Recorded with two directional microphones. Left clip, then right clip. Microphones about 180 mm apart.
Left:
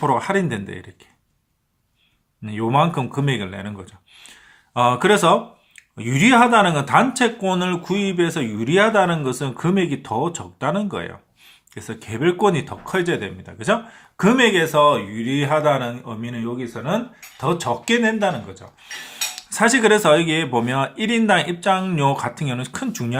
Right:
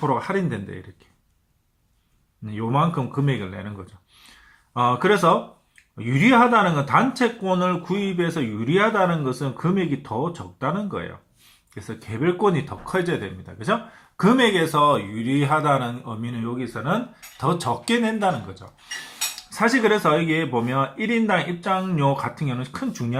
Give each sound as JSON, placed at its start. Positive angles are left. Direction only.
{"t": 0.0, "sound": "speech", "side_deg": 40}
{"t": 2.4, "sound": "speech", "side_deg": 40}
{"t": 17.9, "sound": "speech", "side_deg": 5}
{"t": 18.3, "sound": "speech", "side_deg": 25}
{"t": 19.4, "sound": "speech", "side_deg": 35}